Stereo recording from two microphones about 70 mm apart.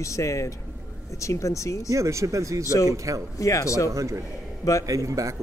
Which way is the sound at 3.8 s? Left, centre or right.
Right.